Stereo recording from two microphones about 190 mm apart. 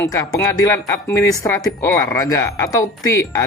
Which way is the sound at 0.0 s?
20° left (ahead or behind).